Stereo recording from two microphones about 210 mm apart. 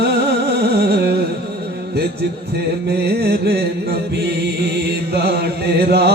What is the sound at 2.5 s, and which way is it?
Music, 50° right (ahead or behind).